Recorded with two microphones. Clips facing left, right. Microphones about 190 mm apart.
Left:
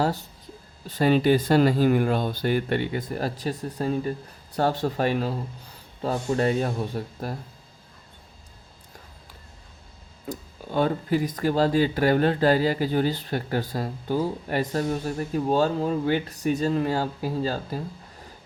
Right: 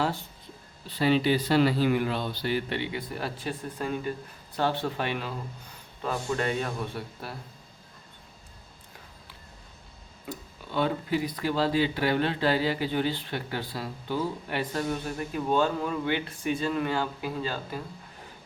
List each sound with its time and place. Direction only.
0.0 s speech: 40° left (ahead or behind)
10.2 s speech: 45° left (ahead or behind)